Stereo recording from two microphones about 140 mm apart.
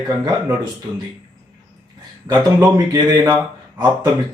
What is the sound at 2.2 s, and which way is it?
Speech, 30° right (ahead or behind).